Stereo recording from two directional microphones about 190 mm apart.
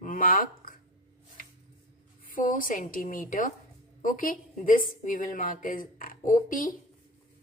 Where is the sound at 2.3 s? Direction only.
45° left (ahead or behind).